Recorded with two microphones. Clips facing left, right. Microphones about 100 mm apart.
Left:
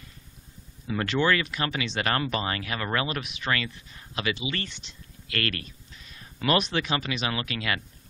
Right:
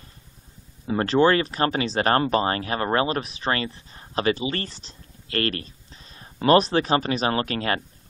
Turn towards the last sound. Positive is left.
turn(degrees=-40)  # may be behind; listen again after turning